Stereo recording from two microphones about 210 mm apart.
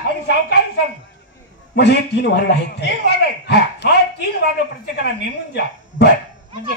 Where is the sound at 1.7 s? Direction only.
55° left (ahead or behind).